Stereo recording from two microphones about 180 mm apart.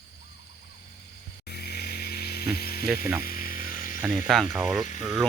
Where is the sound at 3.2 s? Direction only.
55° left (ahead or behind).